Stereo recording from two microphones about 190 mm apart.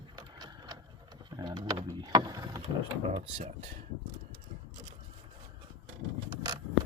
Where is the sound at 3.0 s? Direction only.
30° right (ahead or behind).